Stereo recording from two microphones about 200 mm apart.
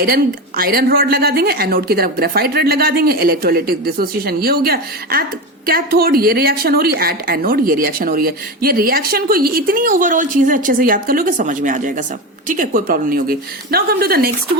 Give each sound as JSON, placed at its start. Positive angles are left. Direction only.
{"t": 0.0, "sound": "a woman's voice", "side_deg": -45}